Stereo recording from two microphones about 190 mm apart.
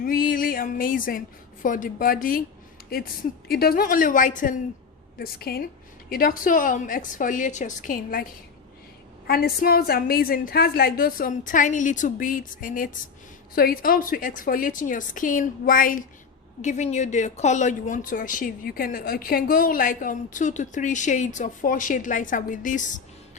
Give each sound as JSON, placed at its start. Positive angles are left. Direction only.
{"t": 0.0, "sound": "music", "side_deg": 50}
{"t": 1.6, "sound": "speech", "side_deg": 45}
{"t": 3.5, "sound": "speech", "side_deg": 55}